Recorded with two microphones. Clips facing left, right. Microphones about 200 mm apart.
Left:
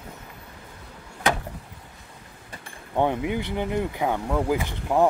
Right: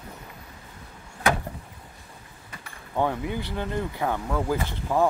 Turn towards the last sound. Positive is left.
turn(degrees=15)  # may be behind; listen again after turning